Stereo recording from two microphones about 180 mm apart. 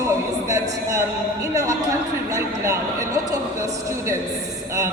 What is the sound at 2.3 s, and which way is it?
A man's voice, 15° right (ahead or behind).